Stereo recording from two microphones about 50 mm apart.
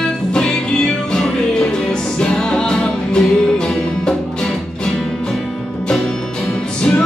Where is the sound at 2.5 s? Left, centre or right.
Centre.